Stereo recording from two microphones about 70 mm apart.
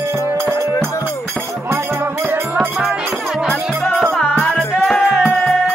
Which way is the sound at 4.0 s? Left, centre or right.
Centre.